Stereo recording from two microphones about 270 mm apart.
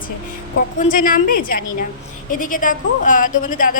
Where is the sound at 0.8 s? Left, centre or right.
Left.